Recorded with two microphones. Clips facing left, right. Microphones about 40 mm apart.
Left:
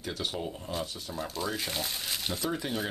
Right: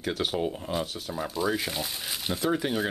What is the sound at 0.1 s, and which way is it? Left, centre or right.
Speech, centre.